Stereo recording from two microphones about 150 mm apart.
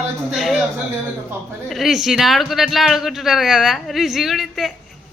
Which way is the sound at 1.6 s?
Centre (ahead or behind).